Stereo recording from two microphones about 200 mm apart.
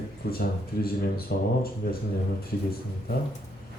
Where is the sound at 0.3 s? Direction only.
50° left (ahead or behind).